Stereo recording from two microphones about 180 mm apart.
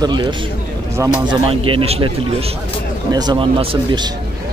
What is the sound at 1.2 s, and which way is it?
Speech, 25° right (ahead or behind).